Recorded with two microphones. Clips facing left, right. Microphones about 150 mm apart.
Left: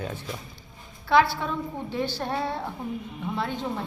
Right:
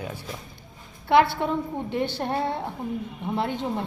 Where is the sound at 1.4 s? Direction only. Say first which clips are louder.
Right 4 dB; 20° right (ahead or behind).